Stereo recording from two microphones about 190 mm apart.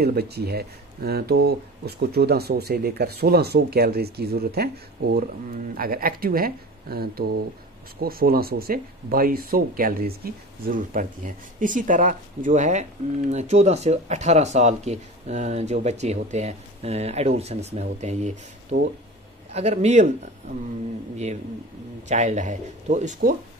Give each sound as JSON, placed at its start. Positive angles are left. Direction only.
{"t": 0.0, "sound": "speech", "side_deg": -55}
{"t": 22.0, "sound": "speech", "side_deg": -40}